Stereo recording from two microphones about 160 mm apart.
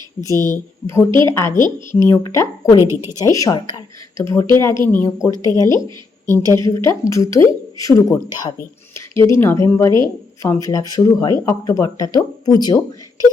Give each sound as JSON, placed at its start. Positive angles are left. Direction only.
{"t": 0.3, "sound": "a woman's voice", "side_deg": 15}
{"t": 1.5, "sound": "a woman's voice", "side_deg": -25}
{"t": 2.0, "sound": "a woman's voice", "side_deg": 20}
{"t": 2.8, "sound": "speech", "side_deg": -20}
{"t": 3.2, "sound": "a woman's voice", "side_deg": 20}
{"t": 5.3, "sound": "a woman's voice", "side_deg": -25}
{"t": 6.3, "sound": "speech", "side_deg": 20}